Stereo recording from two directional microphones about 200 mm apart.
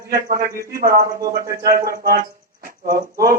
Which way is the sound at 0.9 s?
15° right (ahead or behind).